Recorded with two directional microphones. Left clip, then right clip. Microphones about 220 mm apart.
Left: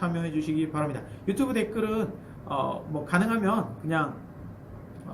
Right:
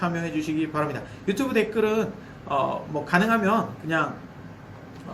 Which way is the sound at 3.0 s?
15° left (ahead or behind).